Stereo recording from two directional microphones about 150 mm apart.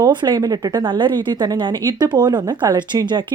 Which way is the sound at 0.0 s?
30° right (ahead or behind).